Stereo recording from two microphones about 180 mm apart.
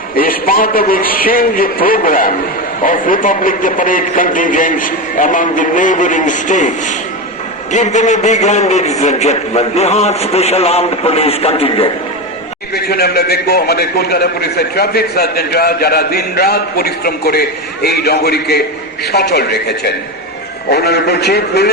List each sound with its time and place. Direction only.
0.2 s a man's voice: 50° left (ahead or behind); by 11.9 s 35° left (ahead or behind)
12.7 s a man's voice: 60° left (ahead or behind)